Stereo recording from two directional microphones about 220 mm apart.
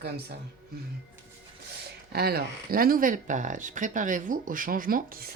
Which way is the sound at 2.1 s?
45° right (ahead or behind).